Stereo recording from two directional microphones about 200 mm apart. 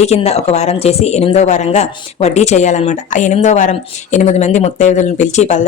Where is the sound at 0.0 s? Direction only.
35° left (ahead or behind).